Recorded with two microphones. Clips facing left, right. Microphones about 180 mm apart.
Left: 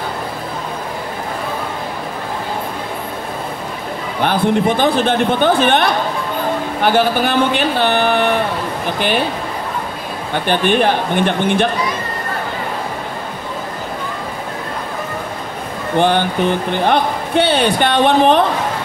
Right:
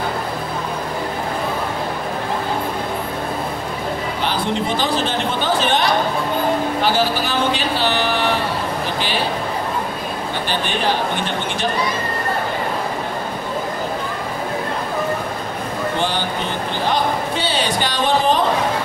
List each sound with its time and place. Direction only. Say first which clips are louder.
4.2 s speech: left 8 dB; 55° left (ahead or behind)
10.5 s speech: left 7 dB; 55° left (ahead or behind)
16.0 s speech: left 12 dB; 55° left (ahead or behind)